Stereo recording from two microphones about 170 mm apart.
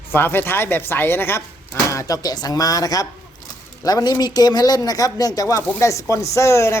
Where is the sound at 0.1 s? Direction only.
10° left (ahead or behind).